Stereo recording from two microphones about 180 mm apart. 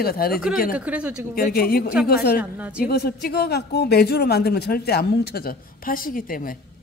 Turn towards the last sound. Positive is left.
turn(degrees=50)  # may be behind; listen again after turning